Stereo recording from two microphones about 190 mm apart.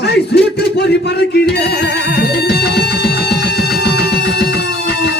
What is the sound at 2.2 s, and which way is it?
Music, 55° left (ahead or behind).